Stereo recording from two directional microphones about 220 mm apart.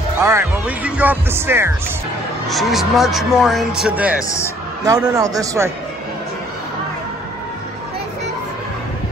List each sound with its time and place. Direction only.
0.2 s speech: 10° right (ahead or behind)
2.4 s speech: centre (ahead or behind)